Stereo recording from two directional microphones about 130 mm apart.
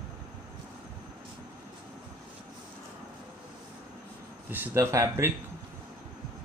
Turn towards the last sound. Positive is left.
turn(degrees=-20)  # may be behind; listen again after turning